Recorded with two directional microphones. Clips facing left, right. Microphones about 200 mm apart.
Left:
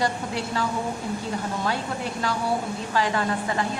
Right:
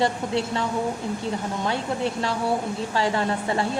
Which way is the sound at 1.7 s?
25° right (ahead or behind).